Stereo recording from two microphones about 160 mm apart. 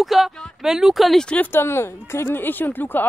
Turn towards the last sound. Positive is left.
turn(degrees=10)  # may be behind; listen again after turning